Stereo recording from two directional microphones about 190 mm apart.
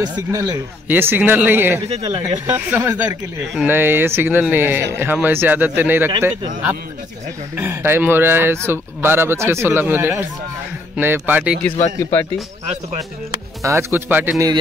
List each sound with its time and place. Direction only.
0.0 s a man's voice: 20° right (ahead or behind)
11.6 s speech: 10° left (ahead or behind)
13.6 s speech: 15° right (ahead or behind)